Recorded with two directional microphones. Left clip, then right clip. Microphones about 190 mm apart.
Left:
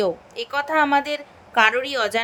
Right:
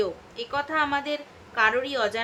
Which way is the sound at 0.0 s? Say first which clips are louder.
Left 5 dB; 45° left (ahead or behind).